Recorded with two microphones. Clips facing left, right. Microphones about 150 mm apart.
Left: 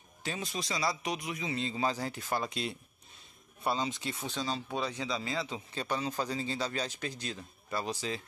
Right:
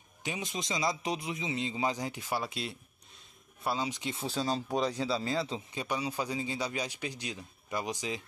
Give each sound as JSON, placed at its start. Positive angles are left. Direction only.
{"t": 0.2, "sound": "a man's voice", "side_deg": -15}
{"t": 4.2, "sound": "speech", "side_deg": -35}
{"t": 5.7, "sound": "a man's voice", "side_deg": -10}